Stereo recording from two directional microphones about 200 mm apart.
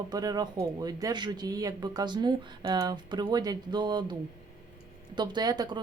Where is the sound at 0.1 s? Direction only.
20° right (ahead or behind).